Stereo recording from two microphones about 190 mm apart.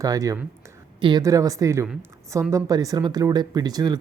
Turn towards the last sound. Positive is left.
turn(degrees=-20)  # may be behind; listen again after turning